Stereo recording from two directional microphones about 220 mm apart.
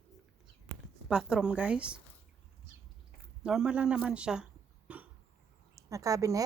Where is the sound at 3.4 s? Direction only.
5° right (ahead or behind).